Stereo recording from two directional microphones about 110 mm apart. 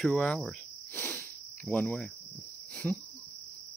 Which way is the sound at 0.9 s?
15° left (ahead or behind).